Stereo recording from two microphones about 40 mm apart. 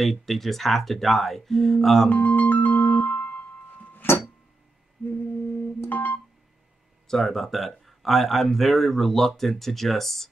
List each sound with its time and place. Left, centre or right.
0.0 s speech: centre
2.0 s music: left
3.3 s music: left
3.9 s music: left
5.4 s music: left
7.1 s speech: centre